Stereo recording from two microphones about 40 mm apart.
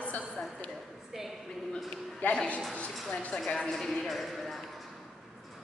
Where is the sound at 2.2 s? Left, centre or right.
Left.